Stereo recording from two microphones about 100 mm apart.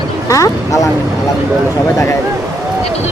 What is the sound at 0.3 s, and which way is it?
Speech, 35° left (ahead or behind).